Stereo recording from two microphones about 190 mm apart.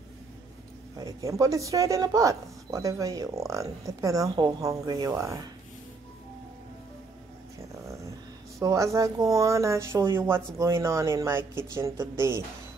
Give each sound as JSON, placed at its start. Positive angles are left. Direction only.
{"t": 0.9, "sound": "a woman's voice", "side_deg": -20}
{"t": 8.5, "sound": "a woman's voice", "side_deg": -15}